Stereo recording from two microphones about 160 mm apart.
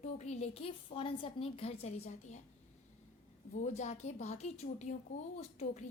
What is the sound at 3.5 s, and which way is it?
A woman's voice, 50° left (ahead or behind).